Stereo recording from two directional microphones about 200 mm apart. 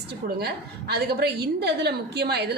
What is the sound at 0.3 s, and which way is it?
A woman's voice, 55° right (ahead or behind).